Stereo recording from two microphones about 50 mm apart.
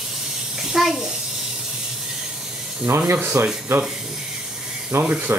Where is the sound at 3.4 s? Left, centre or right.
Right.